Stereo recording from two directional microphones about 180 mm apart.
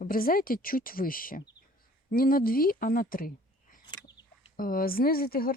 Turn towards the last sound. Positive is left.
turn(degrees=55)  # may be behind; listen again after turning